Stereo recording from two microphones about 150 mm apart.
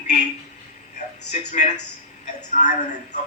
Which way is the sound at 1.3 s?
50° left (ahead or behind).